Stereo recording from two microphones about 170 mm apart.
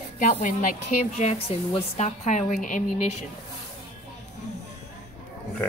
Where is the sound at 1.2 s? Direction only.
35° left (ahead or behind).